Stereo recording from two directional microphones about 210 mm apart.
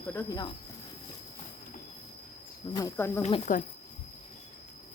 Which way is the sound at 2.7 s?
15° left (ahead or behind).